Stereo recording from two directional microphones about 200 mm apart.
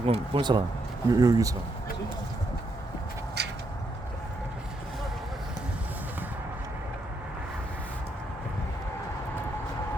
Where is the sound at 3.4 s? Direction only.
55° right (ahead or behind).